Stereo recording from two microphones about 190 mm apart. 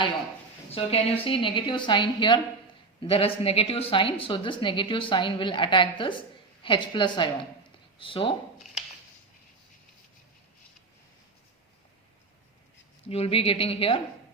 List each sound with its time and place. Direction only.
0.7 s a woman's voice: 30° left (ahead or behind)
13.1 s a woman's voice: 30° left (ahead or behind)